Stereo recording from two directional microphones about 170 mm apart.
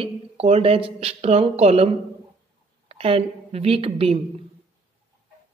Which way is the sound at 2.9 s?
35° right (ahead or behind).